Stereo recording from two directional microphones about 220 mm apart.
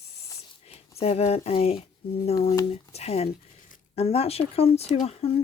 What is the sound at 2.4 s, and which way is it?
Speech, 20° left (ahead or behind).